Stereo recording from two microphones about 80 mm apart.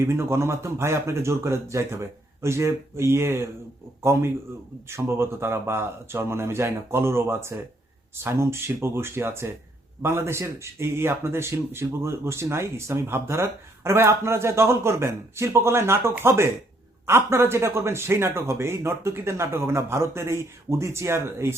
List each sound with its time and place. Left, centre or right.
0.0 s speech: right